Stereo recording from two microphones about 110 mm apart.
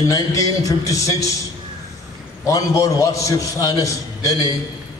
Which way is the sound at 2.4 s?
30° left (ahead or behind).